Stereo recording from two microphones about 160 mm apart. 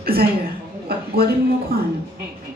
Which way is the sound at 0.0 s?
70° right (ahead or behind).